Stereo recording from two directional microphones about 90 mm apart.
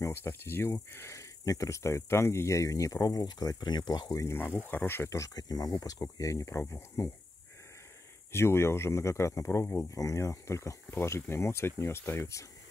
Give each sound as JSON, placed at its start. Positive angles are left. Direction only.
{"t": 0.0, "sound": "speech", "side_deg": 25}
{"t": 4.2, "sound": "speech", "side_deg": 25}
{"t": 8.3, "sound": "speech", "side_deg": 30}